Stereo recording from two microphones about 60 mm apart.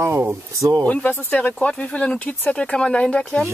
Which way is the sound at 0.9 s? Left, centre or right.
Left.